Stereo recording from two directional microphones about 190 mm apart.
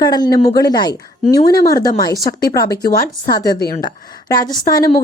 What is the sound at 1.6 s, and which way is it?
Speech, 50° left (ahead or behind).